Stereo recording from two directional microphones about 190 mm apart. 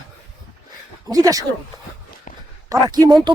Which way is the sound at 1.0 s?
20° right (ahead or behind).